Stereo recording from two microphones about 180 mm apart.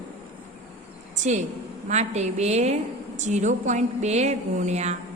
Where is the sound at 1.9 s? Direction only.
40° right (ahead or behind).